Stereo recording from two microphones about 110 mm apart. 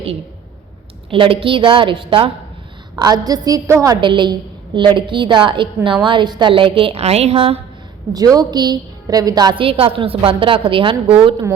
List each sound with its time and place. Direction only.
1.1 s a woman's voice: 55° right (ahead or behind)
2.9 s a woman's voice: 35° right (ahead or behind)
4.0 s a woman's voice: 45° right (ahead or behind); by 7.6 s 60° right (ahead or behind)
8.1 s a woman's voice: 35° right (ahead or behind)
9.6 s a woman's voice: 55° right (ahead or behind)